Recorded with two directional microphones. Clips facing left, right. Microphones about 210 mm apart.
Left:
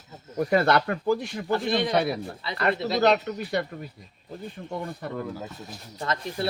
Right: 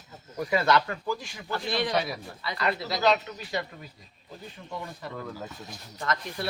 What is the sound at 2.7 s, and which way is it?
Speech, 25° left (ahead or behind).